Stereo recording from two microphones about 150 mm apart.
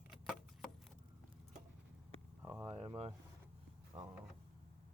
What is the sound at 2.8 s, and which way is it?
Vehicle, 40° right (ahead or behind).